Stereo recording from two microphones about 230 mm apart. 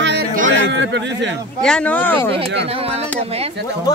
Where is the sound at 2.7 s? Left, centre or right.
Right.